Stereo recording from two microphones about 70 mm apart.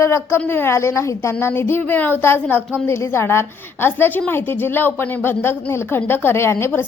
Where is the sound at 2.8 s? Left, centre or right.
Left.